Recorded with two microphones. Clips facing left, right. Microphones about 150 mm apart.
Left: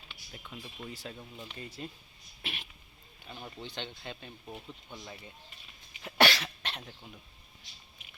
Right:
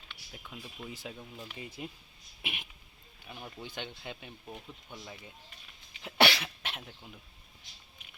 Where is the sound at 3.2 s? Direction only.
10° right (ahead or behind).